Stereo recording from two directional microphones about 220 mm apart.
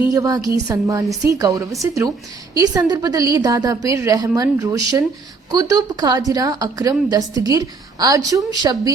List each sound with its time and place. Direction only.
0.0 s a woman's voice: 15° right (ahead or behind)